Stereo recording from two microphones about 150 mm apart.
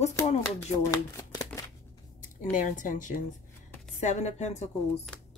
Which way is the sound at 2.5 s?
60° left (ahead or behind).